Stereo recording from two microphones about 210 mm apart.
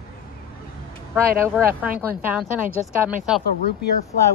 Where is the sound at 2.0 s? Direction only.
5° right (ahead or behind).